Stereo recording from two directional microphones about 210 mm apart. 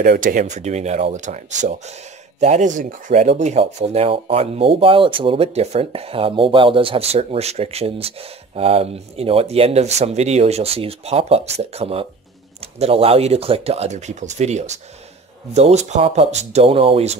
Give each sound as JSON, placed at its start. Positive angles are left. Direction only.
{"t": 0.0, "sound": "speech", "side_deg": -45}